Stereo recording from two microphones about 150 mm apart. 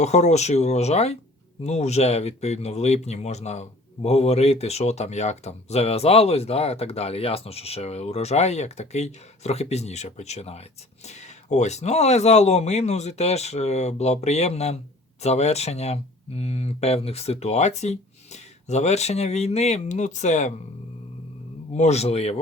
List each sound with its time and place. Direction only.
0.0 s speech: 50° left (ahead or behind)
21.8 s speech: 45° left (ahead or behind)